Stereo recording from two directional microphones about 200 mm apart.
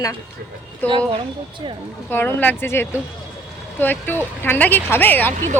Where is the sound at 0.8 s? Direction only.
25° right (ahead or behind).